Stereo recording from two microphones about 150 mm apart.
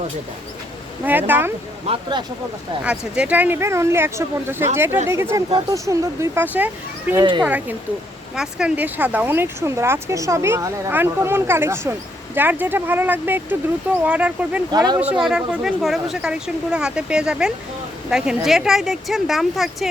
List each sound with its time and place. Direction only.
1.0 s speech: 10° right (ahead or behind)
1.9 s speech: 30° right (ahead or behind)
2.8 s speech: 5° right (ahead or behind)
14.7 s speech: 30° right (ahead or behind)
15.1 s speech: 5° right (ahead or behind)